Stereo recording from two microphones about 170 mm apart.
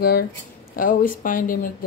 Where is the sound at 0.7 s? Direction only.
55° left (ahead or behind).